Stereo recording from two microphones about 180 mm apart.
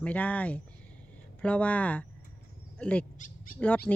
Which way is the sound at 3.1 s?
50° left (ahead or behind).